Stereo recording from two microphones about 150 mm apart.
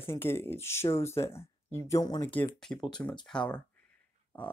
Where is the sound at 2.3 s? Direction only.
10° left (ahead or behind).